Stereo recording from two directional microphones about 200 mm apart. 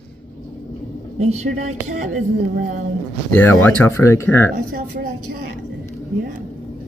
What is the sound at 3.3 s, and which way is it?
Speech, 10° left (ahead or behind).